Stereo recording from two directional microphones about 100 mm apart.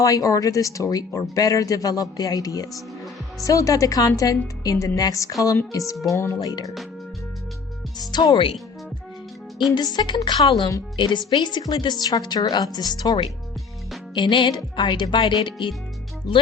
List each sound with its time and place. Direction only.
0.0 s speech: 35° left (ahead or behind)
8.1 s speech: 40° left (ahead or behind)
9.7 s speech: 40° left (ahead or behind)
10.9 s a woman's voice: 50° left (ahead or behind)
14.1 s a woman's voice: 50° left (ahead or behind)